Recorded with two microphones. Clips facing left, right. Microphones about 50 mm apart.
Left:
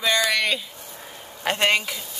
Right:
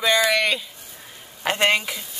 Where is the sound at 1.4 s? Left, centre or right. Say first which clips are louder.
Right 1 dB; centre.